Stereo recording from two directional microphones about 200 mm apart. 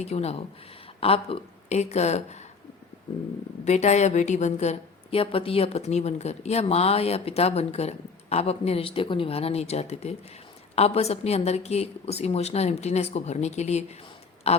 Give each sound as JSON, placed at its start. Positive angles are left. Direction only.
{"t": 0.0, "sound": "a woman's voice", "side_deg": 30}
{"t": 3.6, "sound": "a woman's voice", "side_deg": 35}